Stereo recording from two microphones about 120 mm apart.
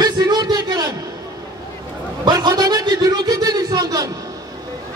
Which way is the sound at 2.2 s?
35° right (ahead or behind).